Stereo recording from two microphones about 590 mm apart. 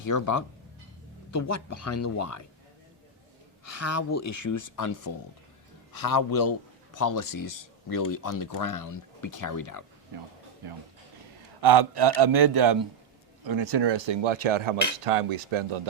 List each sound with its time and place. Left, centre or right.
0.0 s speech: left
3.6 s speech: left
11.6 s a man's voice: right